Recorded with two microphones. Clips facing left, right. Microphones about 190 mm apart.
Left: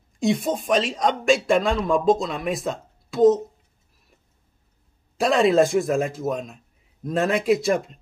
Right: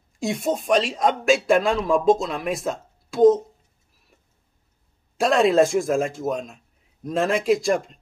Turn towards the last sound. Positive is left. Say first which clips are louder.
# even
turn(degrees=0)  # may be behind; listen again after turning